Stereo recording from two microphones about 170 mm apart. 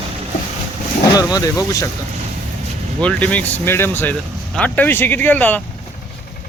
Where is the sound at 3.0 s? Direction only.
10° left (ahead or behind).